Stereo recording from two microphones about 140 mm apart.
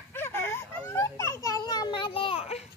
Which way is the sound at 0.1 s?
15° left (ahead or behind).